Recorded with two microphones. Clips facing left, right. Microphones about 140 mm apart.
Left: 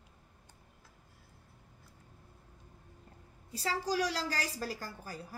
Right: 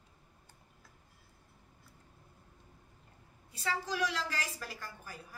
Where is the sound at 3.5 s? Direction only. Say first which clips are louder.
Left 3 dB; 35° left (ahead or behind).